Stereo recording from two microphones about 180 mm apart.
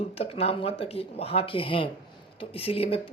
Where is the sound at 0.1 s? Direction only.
30° left (ahead or behind).